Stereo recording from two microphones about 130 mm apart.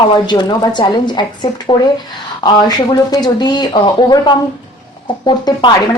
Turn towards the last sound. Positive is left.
turn(degrees=35)  # may be behind; listen again after turning